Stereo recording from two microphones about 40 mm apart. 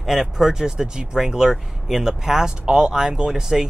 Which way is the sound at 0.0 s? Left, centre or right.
Centre.